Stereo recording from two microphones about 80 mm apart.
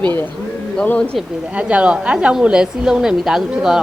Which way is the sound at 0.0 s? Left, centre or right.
Left.